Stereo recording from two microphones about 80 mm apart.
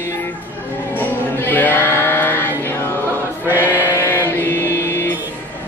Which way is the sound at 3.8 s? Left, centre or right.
Left.